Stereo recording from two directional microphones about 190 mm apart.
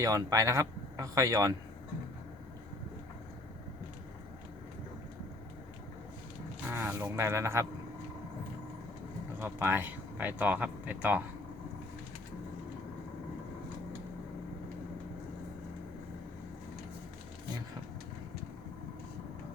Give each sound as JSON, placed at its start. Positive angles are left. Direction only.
{"t": 0.0, "sound": "speech", "side_deg": -20}
{"t": 6.7, "sound": "speech", "side_deg": -10}
{"t": 9.4, "sound": "speech", "side_deg": -10}